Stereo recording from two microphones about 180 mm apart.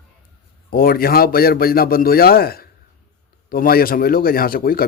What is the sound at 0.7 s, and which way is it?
A man's voice, 55° left (ahead or behind).